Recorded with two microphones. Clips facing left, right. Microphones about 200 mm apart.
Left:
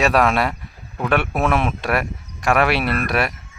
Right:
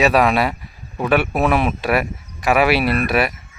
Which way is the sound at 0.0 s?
Centre (ahead or behind).